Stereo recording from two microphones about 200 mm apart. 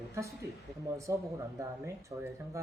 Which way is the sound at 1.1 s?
15° right (ahead or behind).